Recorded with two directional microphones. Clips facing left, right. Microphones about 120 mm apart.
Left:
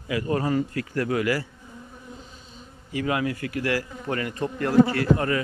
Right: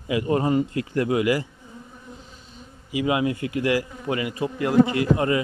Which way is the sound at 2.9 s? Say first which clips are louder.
Right 3 dB; 15° right (ahead or behind).